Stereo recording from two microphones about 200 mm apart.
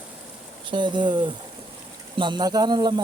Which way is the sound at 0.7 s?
25° right (ahead or behind).